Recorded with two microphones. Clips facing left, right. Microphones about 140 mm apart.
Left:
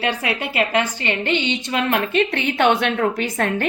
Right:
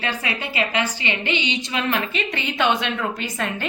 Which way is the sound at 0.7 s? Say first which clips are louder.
Left 3 dB; 45° left (ahead or behind).